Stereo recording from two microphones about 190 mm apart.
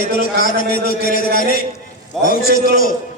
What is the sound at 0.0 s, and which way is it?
A man's voice, 45° left (ahead or behind).